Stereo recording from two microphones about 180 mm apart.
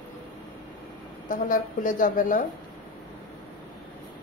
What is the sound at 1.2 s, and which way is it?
A woman's voice, 45° left (ahead or behind).